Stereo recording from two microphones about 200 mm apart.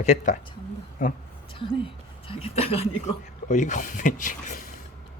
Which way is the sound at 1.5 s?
25° left (ahead or behind).